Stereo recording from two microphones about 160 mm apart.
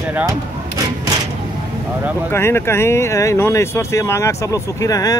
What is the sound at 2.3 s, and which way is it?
Speech, 15° left (ahead or behind).